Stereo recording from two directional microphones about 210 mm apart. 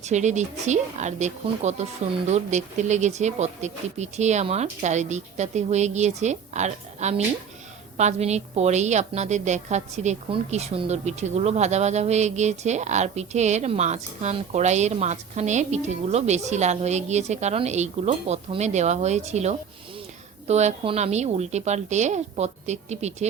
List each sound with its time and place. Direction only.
0.0 s a woman's voice: 35° right (ahead or behind)